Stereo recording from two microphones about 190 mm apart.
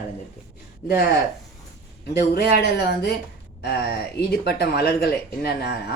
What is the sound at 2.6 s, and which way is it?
Speech, 60° left (ahead or behind).